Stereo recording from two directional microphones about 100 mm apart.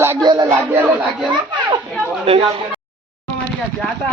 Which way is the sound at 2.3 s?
85° right.